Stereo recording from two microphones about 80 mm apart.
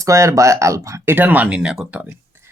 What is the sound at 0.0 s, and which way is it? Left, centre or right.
Speech, right.